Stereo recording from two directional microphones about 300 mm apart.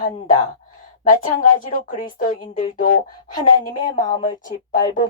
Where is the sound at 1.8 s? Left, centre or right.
Left.